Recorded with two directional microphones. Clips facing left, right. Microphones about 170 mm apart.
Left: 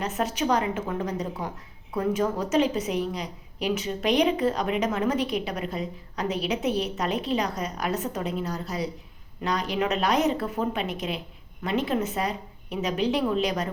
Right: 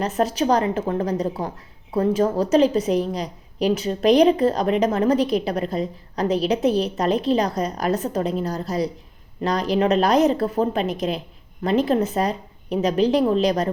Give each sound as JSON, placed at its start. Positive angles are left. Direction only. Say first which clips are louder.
{"t": 0.0, "sound": "a woman's voice", "louder": "right 6 dB", "side_deg": -35}